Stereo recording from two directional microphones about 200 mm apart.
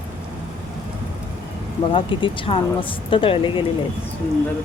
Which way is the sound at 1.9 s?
25° left (ahead or behind).